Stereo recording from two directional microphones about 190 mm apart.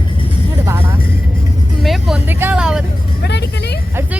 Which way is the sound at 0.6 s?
10° right (ahead or behind).